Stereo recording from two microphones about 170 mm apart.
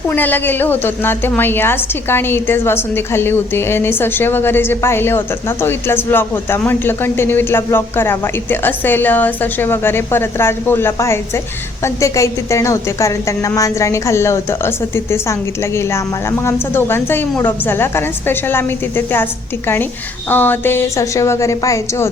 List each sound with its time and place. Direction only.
0.1 s a woman's voice: 10° left (ahead or behind)